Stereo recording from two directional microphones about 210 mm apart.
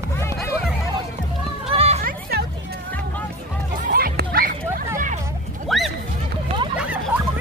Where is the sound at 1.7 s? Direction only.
30° right (ahead or behind).